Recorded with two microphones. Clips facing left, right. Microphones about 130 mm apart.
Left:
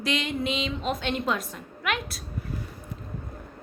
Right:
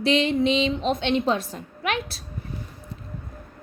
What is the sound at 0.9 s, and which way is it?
Speech, 25° right (ahead or behind).